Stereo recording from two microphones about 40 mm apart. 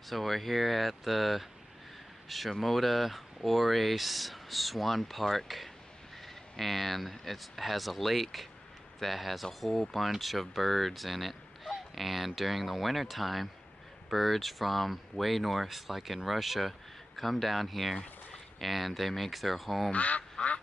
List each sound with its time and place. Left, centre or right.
0.1 s speech: centre
19.9 s speech: left